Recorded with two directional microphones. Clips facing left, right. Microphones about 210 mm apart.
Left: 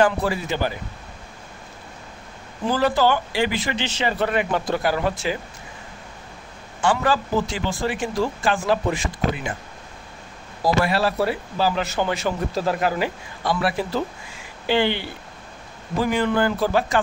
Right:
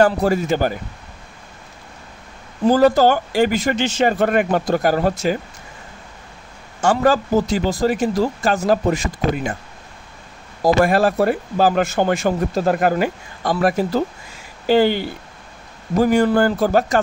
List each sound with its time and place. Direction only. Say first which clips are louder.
0.0 s a man's voice: right 4 dB; 45° right (ahead or behind)
2.7 s a man's voice: right 6 dB; 45° right (ahead or behind)
6.8 s speech: right 5 dB; 45° right (ahead or behind)
10.6 s a man's voice: right 5 dB; 50° right (ahead or behind)